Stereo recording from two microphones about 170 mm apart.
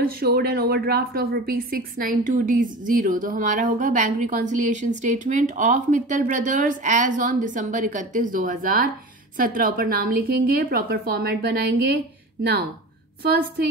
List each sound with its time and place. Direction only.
0.0 s a woman's voice: 65° right (ahead or behind)